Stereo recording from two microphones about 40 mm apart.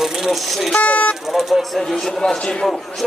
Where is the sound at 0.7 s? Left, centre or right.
Left.